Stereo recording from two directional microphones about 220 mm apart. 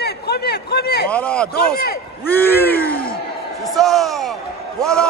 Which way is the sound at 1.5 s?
45° left (ahead or behind).